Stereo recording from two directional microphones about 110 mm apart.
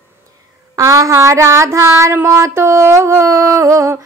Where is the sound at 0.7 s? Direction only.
30° right (ahead or behind).